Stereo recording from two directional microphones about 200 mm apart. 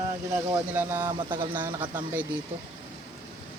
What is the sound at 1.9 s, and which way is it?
Speech, 10° right (ahead or behind).